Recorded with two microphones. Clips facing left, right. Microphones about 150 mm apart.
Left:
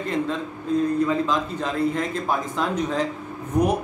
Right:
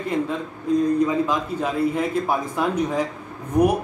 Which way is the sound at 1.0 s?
10° right (ahead or behind).